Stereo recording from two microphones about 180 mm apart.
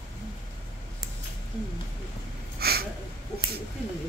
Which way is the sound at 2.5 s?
60° right (ahead or behind).